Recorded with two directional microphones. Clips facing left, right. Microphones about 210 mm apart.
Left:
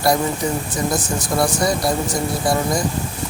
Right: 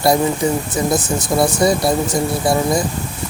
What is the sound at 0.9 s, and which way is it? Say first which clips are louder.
Speech: right 3 dB; 20° right (ahead or behind).